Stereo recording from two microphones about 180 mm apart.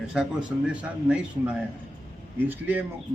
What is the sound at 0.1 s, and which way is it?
A man's voice, 5° right (ahead or behind).